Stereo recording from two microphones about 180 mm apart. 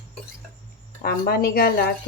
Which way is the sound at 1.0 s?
55° left (ahead or behind).